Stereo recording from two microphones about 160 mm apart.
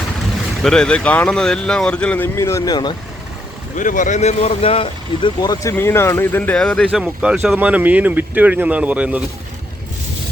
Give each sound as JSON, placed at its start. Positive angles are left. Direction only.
{"t": 0.6, "sound": "speech", "side_deg": 5}
{"t": 3.8, "sound": "speech", "side_deg": 55}